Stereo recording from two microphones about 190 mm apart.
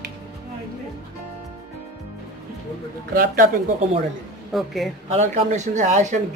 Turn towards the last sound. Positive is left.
turn(degrees=-40)  # may be behind; listen again after turning